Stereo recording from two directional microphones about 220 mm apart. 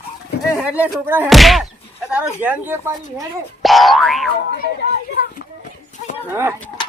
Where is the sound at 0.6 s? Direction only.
5° right (ahead or behind).